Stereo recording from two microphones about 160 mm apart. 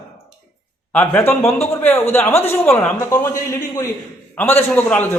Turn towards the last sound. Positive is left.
turn(degrees=15)  # may be behind; listen again after turning